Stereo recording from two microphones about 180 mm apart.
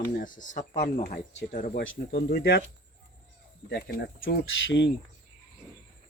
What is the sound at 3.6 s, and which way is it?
Speech, 65° left (ahead or behind).